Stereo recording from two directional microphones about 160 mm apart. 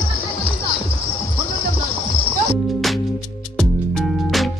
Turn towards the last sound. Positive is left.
turn(degrees=0)  # may be behind; listen again after turning